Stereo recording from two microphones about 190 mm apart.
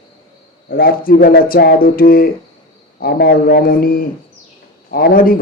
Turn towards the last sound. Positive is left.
turn(degrees=50)  # may be behind; listen again after turning